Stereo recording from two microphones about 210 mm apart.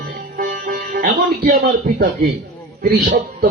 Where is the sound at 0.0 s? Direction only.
45° right (ahead or behind).